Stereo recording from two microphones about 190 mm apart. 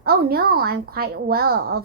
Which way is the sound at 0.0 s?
55° right (ahead or behind).